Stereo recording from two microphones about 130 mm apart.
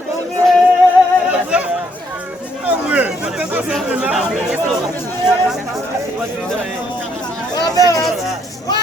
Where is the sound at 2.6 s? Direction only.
10° right (ahead or behind).